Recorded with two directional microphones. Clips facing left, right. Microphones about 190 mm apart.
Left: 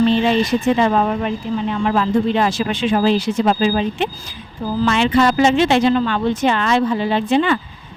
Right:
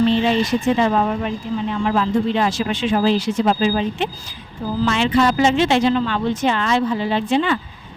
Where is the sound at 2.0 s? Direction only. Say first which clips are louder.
Left 2 dB; 55° left (ahead or behind).